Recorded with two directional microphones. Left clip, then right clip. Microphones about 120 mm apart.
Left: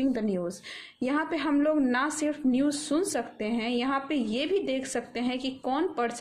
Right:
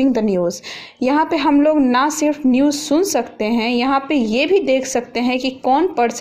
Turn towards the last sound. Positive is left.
turn(degrees=-25)  # may be behind; listen again after turning